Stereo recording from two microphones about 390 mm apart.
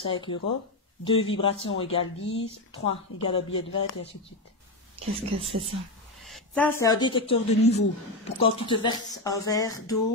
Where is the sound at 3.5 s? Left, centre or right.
Left.